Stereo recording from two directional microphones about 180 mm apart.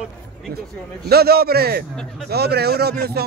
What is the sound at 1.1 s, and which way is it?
Speech, 60° right (ahead or behind).